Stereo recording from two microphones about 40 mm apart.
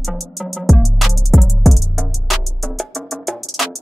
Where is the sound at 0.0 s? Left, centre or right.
Centre.